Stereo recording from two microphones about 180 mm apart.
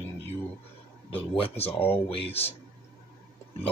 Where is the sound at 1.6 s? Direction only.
10° left (ahead or behind).